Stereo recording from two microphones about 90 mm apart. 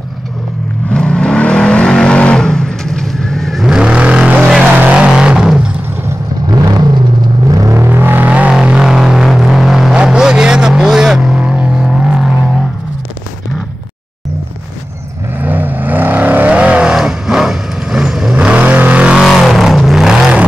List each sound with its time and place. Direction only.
0.8 s vehicle: 10° left (ahead or behind); by 5.6 s 10° right (ahead or behind)
6.4 s vehicle: 45° right (ahead or behind)
7.5 s vehicle: 35° right (ahead or behind); by 12.3 s 5° right (ahead or behind)
15.4 s vehicle: 20° right (ahead or behind)
19.2 s vehicle: centre (ahead or behind)